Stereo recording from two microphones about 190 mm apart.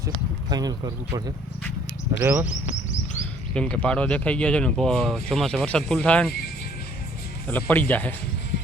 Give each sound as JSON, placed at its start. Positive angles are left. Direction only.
{"t": 0.5, "sound": "speech", "side_deg": -20}
{"t": 2.2, "sound": "speech", "side_deg": -10}
{"t": 3.5, "sound": "speech", "side_deg": 5}
{"t": 7.4, "sound": "speech", "side_deg": 10}